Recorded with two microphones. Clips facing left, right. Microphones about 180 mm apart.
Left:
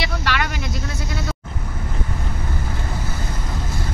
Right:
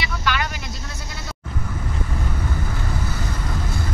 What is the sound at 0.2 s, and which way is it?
Vehicle, 65° left (ahead or behind).